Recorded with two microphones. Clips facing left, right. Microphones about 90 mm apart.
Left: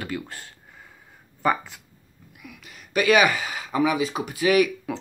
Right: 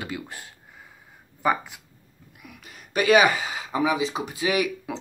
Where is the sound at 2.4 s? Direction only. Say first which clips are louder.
Left 1 dB; 35° right (ahead or behind).